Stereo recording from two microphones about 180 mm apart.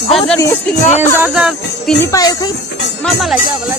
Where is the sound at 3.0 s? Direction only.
Centre (ahead or behind).